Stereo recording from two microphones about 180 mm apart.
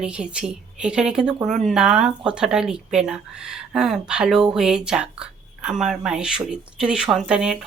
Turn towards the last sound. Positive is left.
turn(degrees=-5)  # may be behind; listen again after turning